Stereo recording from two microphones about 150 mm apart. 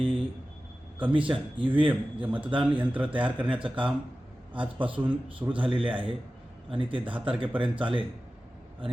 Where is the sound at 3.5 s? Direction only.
35° right (ahead or behind).